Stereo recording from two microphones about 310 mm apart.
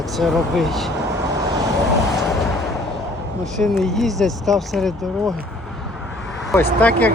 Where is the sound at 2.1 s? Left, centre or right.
Centre.